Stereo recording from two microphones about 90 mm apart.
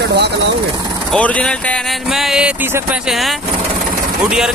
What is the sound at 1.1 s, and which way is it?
Speech, 15° left (ahead or behind).